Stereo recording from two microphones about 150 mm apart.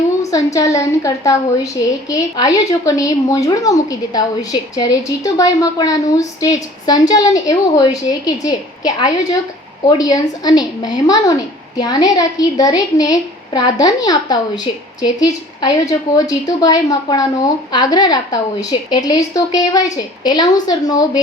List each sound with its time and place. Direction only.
0.2 s a woman's voice: 20° left (ahead or behind)